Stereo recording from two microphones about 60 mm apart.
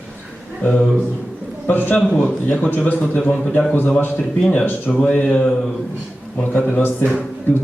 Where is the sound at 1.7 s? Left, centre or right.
Left.